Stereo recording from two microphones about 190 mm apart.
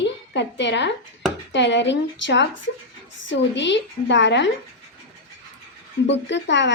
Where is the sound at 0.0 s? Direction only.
70° left (ahead or behind).